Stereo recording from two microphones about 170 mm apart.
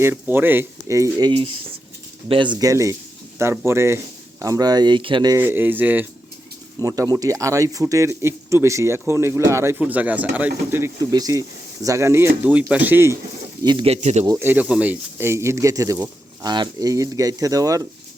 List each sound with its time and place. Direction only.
0.0 s speech: 10° right (ahead or behind)
1.3 s speech: 30° right (ahead or behind)
5.4 s speech: 10° right (ahead or behind)
13.7 s speech: 30° right (ahead or behind)
14.3 s speech: 15° right (ahead or behind)